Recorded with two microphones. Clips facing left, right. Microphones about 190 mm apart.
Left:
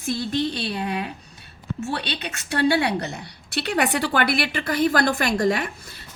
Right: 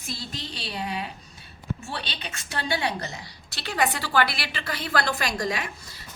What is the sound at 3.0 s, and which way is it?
A woman's voice, 60° left (ahead or behind).